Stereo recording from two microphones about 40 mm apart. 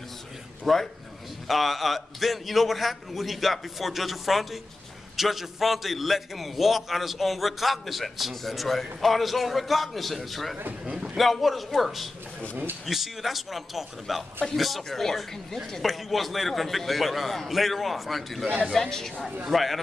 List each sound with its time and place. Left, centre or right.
0.7 s a man's voice: centre
12.4 s a man's voice: right
12.8 s a man's voice: centre
19.5 s a man's voice: centre